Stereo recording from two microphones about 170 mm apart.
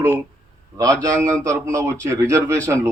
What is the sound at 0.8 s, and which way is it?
A man's voice, 15° right (ahead or behind).